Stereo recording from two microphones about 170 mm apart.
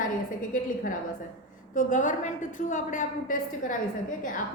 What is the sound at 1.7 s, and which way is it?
A woman's voice, 50° left (ahead or behind).